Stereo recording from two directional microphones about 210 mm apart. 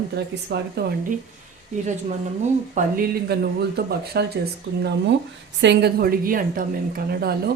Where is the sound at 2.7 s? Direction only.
45° right (ahead or behind).